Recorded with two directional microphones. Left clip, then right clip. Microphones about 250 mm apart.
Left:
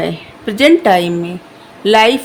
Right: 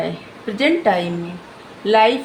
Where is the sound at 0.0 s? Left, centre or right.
Left.